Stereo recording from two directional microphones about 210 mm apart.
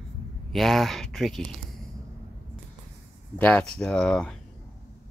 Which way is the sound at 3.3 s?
5° left (ahead or behind).